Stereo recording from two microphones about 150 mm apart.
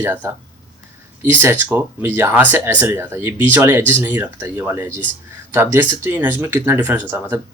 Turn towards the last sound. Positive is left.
turn(degrees=-15)  # may be behind; listen again after turning